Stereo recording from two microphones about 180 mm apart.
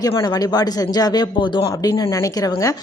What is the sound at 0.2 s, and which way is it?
Speech, 20° left (ahead or behind).